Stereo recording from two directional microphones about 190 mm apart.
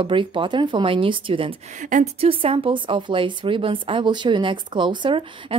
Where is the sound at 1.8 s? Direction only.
40° right (ahead or behind).